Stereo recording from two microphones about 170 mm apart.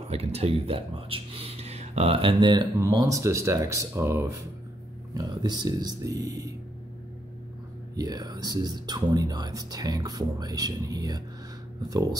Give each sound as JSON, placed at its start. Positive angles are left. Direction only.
{"t": 0.1, "sound": "speech", "side_deg": -35}
{"t": 7.9, "sound": "speech", "side_deg": -20}